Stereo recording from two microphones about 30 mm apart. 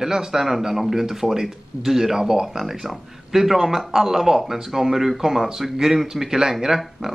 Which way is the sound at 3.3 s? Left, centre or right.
Centre.